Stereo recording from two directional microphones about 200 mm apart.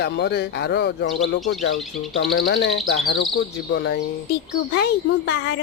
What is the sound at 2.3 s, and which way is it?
Speech, 60° left (ahead or behind).